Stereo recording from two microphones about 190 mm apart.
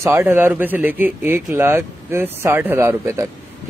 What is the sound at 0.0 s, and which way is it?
A man's voice, 10° right (ahead or behind).